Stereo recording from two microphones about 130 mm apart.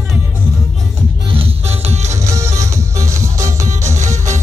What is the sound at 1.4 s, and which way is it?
Music, 55° right (ahead or behind).